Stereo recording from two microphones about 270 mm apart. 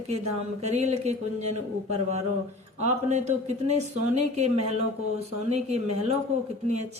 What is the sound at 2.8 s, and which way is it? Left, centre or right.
Speech, right.